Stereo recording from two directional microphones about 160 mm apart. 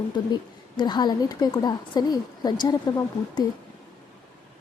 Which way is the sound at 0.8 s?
25° left (ahead or behind).